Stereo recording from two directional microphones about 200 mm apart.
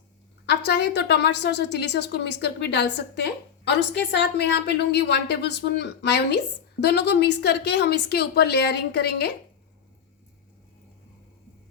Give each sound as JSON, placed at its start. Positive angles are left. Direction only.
{"t": 0.4, "sound": "a woman's voice", "side_deg": 55}